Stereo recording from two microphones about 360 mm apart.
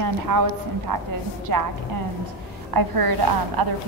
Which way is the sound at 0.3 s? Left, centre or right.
Right.